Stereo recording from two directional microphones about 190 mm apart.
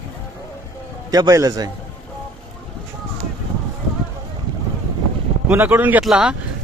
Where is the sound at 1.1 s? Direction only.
20° right (ahead or behind).